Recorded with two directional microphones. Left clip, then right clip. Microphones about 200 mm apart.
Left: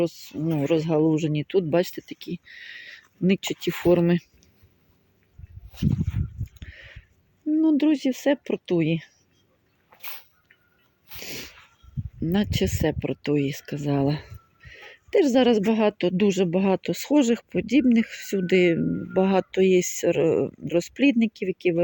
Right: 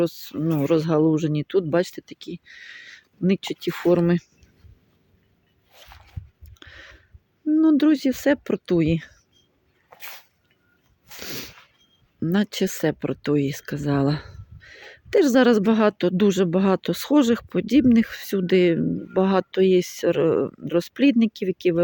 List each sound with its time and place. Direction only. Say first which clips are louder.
0.0 s speech: right 2 dB; 15° right (ahead or behind)
5.7 s speech: left 17 dB; 35° right (ahead or behind)
6.4 s a sound: right 1 dB; 15° right (ahead or behind)
7.5 s speech: right 3 dB; 20° right (ahead or behind)
9.9 s sneeze: right 2 dB; 35° right (ahead or behind)
12.2 s speech: right 2 dB; 10° right (ahead or behind)